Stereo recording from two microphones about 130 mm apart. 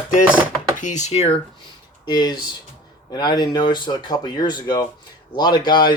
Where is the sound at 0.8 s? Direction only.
65° left (ahead or behind).